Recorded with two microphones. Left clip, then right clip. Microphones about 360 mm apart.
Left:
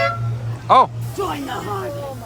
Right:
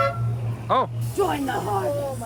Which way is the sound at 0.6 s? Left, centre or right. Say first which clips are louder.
Left 9 dB; centre.